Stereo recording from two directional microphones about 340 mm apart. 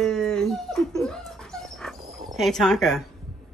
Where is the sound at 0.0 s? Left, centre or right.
Centre.